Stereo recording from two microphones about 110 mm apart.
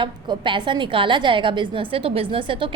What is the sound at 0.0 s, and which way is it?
A woman's voice, 50° right (ahead or behind).